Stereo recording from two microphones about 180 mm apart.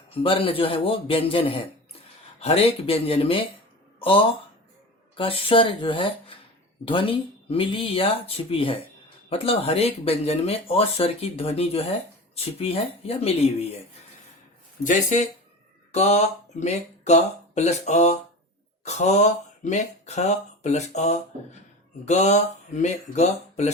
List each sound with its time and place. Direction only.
0.1 s speech: 30° left (ahead or behind)
5.1 s speech: 30° left (ahead or behind)
14.8 s speech: 45° left (ahead or behind)